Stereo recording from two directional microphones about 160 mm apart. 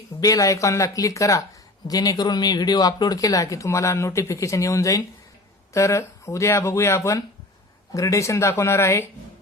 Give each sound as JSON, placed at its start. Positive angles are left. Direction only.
{"t": 0.2, "sound": "speech", "side_deg": 20}